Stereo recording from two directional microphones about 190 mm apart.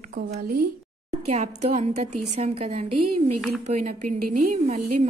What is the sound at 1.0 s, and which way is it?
A woman's voice, 35° right (ahead or behind).